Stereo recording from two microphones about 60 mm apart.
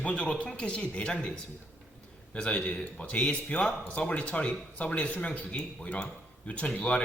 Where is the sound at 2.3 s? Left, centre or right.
Left.